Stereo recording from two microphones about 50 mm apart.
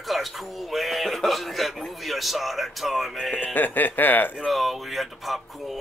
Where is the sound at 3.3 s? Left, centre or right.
Left.